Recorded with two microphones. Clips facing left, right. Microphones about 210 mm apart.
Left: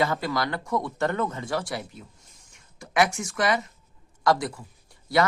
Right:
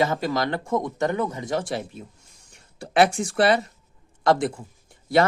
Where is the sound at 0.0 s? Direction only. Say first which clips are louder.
Right 3 dB; 20° right (ahead or behind).